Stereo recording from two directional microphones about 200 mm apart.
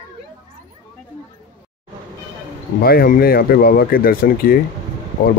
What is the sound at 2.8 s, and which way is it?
Speech, 50° left (ahead or behind).